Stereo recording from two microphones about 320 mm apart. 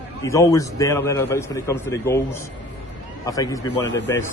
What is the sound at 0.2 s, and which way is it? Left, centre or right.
A man's voice, centre.